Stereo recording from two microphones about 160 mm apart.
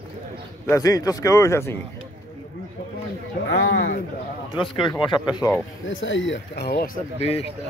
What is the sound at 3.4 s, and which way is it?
Speech, 90° left.